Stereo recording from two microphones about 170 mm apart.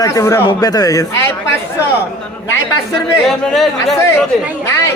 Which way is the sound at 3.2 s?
Centre (ahead or behind).